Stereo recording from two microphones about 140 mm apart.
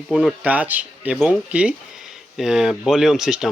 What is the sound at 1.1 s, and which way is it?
Speech, centre (ahead or behind).